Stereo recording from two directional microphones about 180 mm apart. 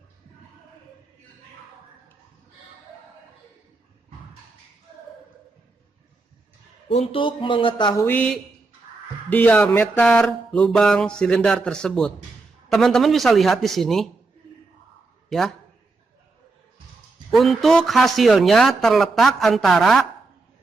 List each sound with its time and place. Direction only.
6.8 s speech: 35° left (ahead or behind)
8.0 s a woman's voice: 5° left (ahead or behind)
15.3 s a man's voice: centre (ahead or behind)
17.3 s speech: centre (ahead or behind)